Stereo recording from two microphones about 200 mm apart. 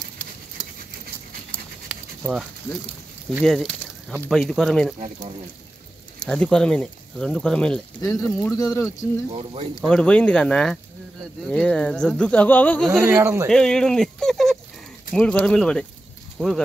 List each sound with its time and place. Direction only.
1.9 s dog: centre (ahead or behind)
3.4 s speech: centre (ahead or behind)
6.1 s speech: 5° left (ahead or behind)
8.0 s speech: 15° left (ahead or behind)
12.9 s speech: 10° right (ahead or behind)
13.5 s a sound: 5° left (ahead or behind)
15.1 s speech: 5° left (ahead or behind)